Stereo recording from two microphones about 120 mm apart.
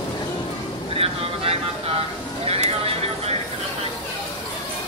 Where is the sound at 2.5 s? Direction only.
55° right (ahead or behind).